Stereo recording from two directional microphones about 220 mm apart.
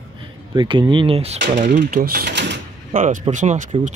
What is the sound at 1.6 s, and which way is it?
Speech, 35° right (ahead or behind).